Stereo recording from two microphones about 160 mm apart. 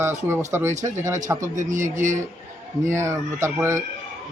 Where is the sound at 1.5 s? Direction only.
50° right (ahead or behind).